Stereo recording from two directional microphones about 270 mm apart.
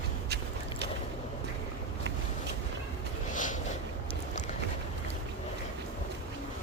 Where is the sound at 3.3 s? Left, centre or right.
Left.